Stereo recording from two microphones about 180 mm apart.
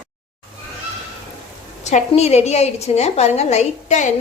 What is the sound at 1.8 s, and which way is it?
A woman's voice, 40° left (ahead or behind).